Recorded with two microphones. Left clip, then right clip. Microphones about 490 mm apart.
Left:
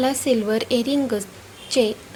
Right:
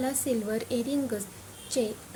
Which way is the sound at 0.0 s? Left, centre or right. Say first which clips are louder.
Left 10 dB; right.